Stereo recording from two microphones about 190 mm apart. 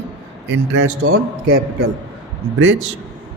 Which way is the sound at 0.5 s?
75° right (ahead or behind).